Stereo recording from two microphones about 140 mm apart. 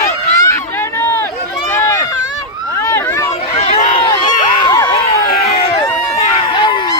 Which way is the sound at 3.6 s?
50° left (ahead or behind).